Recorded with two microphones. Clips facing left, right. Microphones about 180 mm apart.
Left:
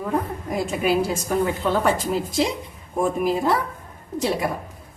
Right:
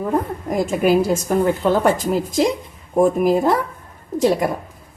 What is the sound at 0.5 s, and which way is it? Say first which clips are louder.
A woman's voice: right 5 dB; 45° right (ahead or behind).